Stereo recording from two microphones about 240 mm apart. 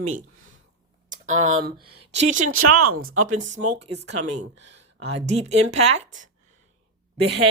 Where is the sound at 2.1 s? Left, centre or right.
Right.